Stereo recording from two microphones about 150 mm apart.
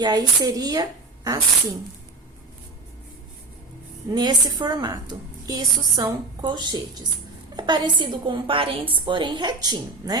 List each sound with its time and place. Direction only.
0.0 s a woman's voice: 25° right (ahead or behind)
4.1 s a woman's voice: 30° right (ahead or behind)